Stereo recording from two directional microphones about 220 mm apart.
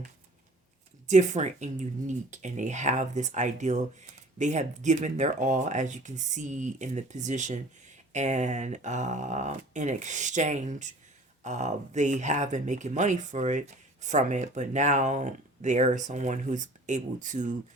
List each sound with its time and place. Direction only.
1.0 s speech: 35° right (ahead or behind)